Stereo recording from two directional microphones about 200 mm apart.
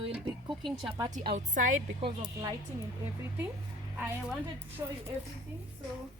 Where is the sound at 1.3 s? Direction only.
40° right (ahead or behind).